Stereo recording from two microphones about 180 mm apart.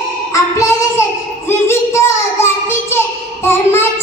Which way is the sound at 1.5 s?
15° left (ahead or behind).